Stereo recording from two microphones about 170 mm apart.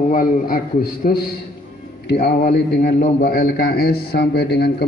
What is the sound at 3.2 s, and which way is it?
A man's voice, 60° left (ahead or behind).